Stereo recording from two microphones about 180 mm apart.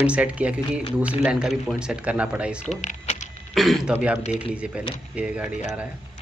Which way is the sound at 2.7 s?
40° left (ahead or behind).